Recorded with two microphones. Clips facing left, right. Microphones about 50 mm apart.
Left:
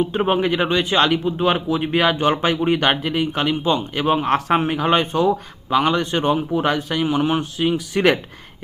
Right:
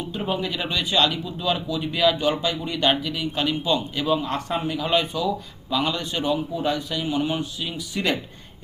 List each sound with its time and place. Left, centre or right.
0.0 s a man's voice: left